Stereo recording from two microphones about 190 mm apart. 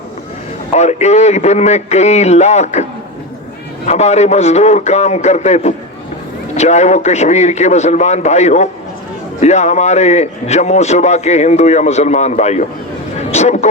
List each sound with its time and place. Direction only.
0.8 s a man's voice: 35° left (ahead or behind)
3.8 s a man's voice: 35° left (ahead or behind)
13.1 s a sound: 35° left (ahead or behind)